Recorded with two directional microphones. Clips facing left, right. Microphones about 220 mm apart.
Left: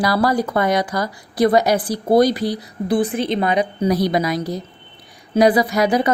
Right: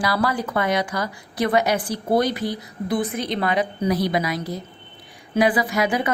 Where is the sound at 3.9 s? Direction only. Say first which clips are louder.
Left 4 dB; 40° left (ahead or behind).